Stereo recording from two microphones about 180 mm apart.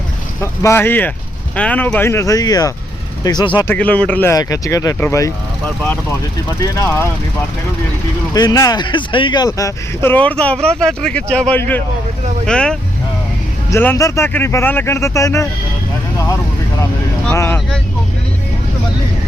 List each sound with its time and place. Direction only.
0.6 s speech: 15° left (ahead or behind)
3.7 s speech: 10° left (ahead or behind)
8.3 s speech: 20° left (ahead or behind)
16.1 s vehicle: 15° left (ahead or behind)
17.3 s speech: 15° left (ahead or behind)